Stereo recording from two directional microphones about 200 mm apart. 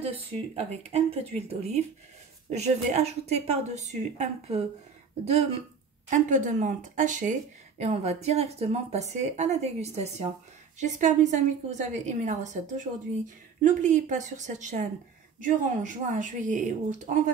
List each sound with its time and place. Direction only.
0.8 s a woman's voice: 30° right (ahead or behind)